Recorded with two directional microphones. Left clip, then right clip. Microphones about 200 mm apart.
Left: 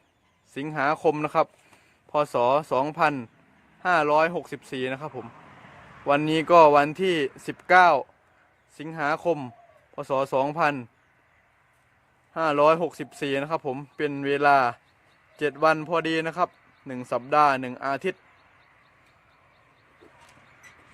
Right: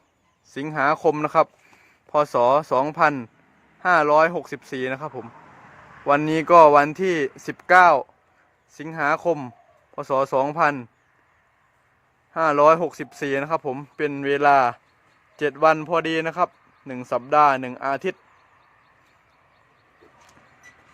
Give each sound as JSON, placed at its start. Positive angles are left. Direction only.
{"t": 0.5, "sound": "a man's voice", "side_deg": -20}
{"t": 12.3, "sound": "a man's voice", "side_deg": -15}